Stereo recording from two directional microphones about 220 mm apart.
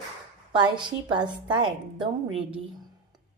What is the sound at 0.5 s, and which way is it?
A woman's voice, 20° right (ahead or behind).